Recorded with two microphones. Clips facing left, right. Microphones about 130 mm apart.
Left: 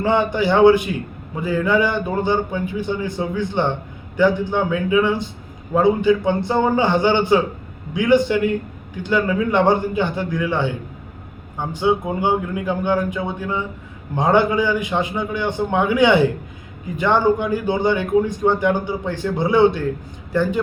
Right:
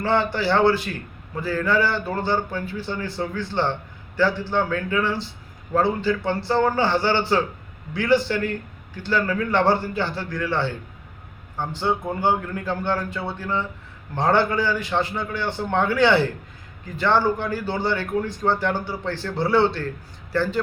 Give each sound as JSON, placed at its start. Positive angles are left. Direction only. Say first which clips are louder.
{"t": 0.0, "sound": "a man's voice", "louder": "left 4 dB", "side_deg": 15}